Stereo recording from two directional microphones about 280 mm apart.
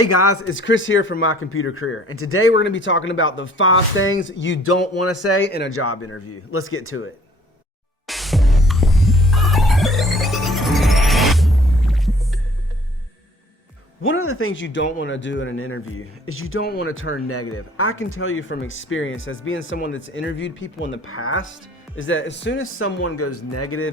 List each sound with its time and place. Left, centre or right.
0.0 s a man's voice: left
5.2 s a man's voice: left
5.5 s speech: left
5.7 s a man's voice: left
8.0 s music: centre
14.0 s a man's voice: left
23.0 s speech: left